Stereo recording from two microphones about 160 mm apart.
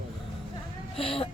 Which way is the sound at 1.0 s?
35° left (ahead or behind).